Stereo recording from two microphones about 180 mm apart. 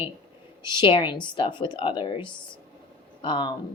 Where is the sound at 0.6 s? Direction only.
25° left (ahead or behind).